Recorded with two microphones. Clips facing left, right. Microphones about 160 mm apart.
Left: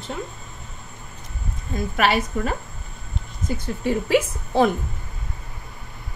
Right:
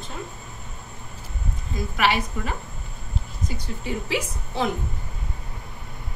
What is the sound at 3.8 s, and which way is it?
Speech, 50° left (ahead or behind).